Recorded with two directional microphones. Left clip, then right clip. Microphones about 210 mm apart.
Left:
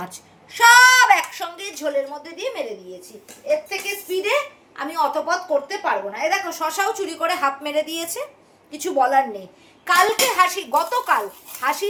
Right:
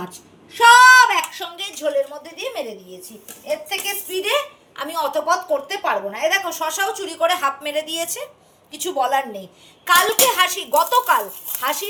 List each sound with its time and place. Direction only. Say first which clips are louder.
0.0 s a sound: even; 55° left (ahead or behind)
1.5 s speech: right 3 dB; 35° left (ahead or behind)
2.2 s a woman's voice: even; 10° left (ahead or behind)
3.8 s a woman's voice: right 1 dB; centre (ahead or behind)